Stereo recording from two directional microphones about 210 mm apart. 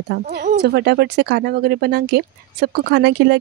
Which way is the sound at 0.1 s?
50° right (ahead or behind).